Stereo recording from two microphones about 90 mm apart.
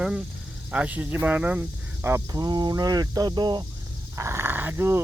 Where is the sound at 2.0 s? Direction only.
30° right (ahead or behind).